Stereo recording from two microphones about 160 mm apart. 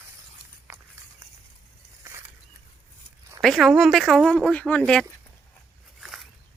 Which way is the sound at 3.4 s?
Centre (ahead or behind).